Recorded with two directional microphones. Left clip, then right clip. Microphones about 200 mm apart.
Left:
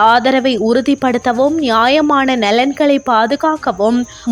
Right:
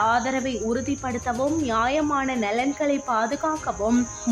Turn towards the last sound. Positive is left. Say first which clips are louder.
# left 11 dB
turn(degrees=40)  # may be behind; listen again after turning